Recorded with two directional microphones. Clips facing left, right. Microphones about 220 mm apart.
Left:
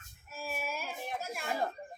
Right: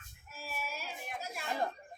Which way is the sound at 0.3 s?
50° left (ahead or behind).